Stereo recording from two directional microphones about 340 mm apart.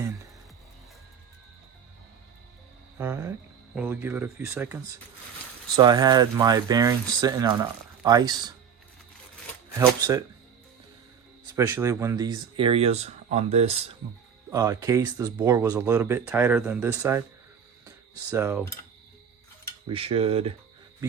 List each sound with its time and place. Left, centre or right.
3.0 s speech: centre
9.7 s speech: centre
11.5 s speech: centre
17.8 s a sound: centre
19.9 s speech: centre